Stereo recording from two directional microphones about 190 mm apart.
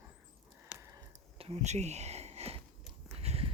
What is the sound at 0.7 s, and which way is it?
Sniff, 5° right (ahead or behind).